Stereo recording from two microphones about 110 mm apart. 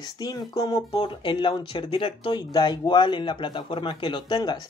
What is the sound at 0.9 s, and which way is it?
Speech, 50° left (ahead or behind).